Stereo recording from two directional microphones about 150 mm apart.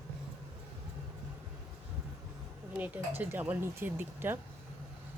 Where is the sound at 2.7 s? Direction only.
10° right (ahead or behind).